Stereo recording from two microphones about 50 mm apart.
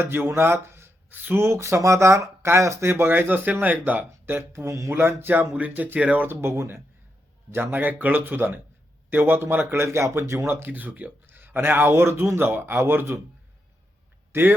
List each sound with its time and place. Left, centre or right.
0.0 s speech: right
1.4 s speech: right
2.8 s speech: right
4.5 s speech: right
4.9 s speech: right
6.2 s speech: right
7.5 s speech: right
9.7 s speech: right
10.4 s speech: right
14.3 s speech: right